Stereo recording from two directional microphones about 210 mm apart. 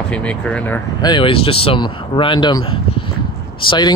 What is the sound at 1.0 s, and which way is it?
Speech, 25° left (ahead or behind).